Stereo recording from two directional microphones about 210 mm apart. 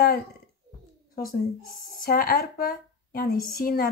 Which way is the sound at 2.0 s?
45° left (ahead or behind).